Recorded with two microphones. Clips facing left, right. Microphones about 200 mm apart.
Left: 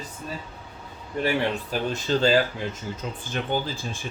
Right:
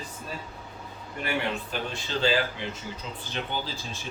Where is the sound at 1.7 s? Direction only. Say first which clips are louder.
Left 7 dB; 45° left (ahead or behind).